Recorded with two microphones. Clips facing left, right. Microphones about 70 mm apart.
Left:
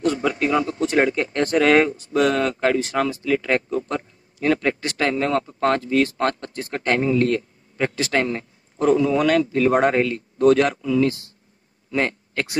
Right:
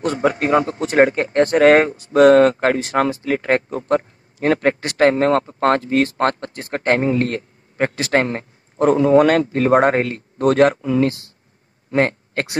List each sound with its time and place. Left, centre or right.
0.0 s a man's voice: right